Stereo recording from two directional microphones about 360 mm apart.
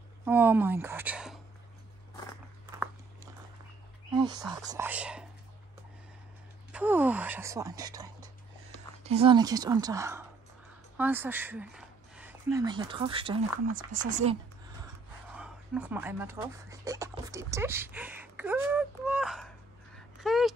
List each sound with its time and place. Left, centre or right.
0.2 s speech: centre
4.1 s speech: centre
6.7 s speech: centre
15.2 s a sound: centre